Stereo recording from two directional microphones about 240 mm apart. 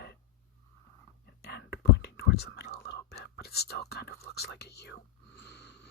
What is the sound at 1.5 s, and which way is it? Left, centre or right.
Whispering, left.